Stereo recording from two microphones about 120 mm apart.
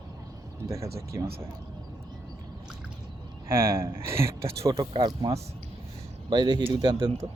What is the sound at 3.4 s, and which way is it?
Speech, 25° right (ahead or behind).